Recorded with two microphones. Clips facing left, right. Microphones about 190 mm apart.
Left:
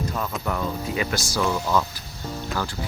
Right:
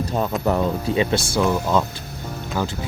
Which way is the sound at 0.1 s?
35° right (ahead or behind).